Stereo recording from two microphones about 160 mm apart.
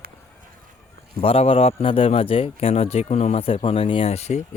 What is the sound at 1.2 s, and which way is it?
A man's voice, 40° left (ahead or behind).